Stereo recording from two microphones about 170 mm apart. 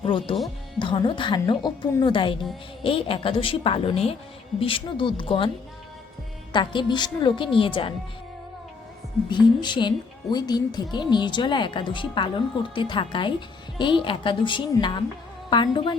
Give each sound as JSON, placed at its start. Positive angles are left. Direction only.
{"t": 0.0, "sound": "a woman's voice", "side_deg": 30}
{"t": 6.5, "sound": "a woman's voice", "side_deg": 25}
{"t": 9.3, "sound": "a woman's voice", "side_deg": 25}